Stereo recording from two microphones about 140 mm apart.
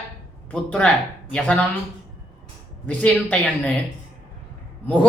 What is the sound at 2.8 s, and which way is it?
Speech, 10° left (ahead or behind).